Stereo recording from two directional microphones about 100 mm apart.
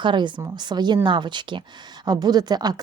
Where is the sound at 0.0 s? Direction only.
50° right (ahead or behind).